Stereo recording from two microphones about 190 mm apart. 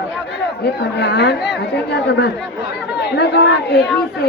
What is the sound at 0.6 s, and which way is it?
Speech, 60° left (ahead or behind).